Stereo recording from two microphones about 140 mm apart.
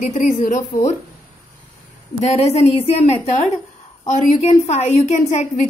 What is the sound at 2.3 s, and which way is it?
A woman's voice, 50° left (ahead or behind).